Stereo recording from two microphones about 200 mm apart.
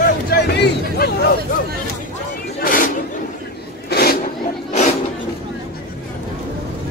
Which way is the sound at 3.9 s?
50° left (ahead or behind).